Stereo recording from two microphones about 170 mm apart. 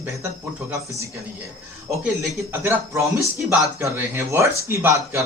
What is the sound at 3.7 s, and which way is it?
Speech, 15° right (ahead or behind).